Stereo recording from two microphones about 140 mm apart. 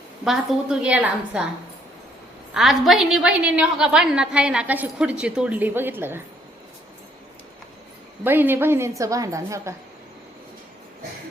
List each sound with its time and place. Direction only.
0.3 s a woman's voice: 5° right (ahead or behind)
2.5 s a woman's voice: centre (ahead or behind)
8.2 s a woman's voice: 15° right (ahead or behind)